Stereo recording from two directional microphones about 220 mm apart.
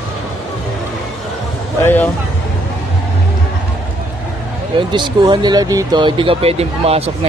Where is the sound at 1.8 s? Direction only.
10° left (ahead or behind).